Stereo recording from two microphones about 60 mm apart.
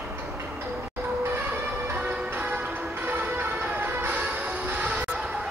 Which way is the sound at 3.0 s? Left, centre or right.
Right.